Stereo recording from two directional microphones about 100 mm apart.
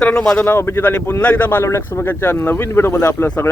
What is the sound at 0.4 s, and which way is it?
Speech, 25° left (ahead or behind).